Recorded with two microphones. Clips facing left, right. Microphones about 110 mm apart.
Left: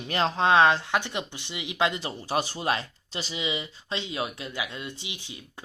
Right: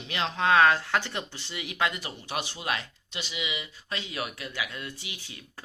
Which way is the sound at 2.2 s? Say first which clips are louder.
Left 6 dB; 35° left (ahead or behind).